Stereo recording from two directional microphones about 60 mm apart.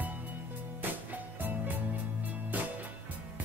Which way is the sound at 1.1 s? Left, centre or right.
Right.